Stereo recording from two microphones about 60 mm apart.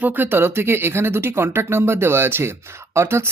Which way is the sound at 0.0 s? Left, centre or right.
Right.